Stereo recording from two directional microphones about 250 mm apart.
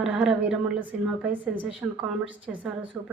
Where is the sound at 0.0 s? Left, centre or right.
Centre.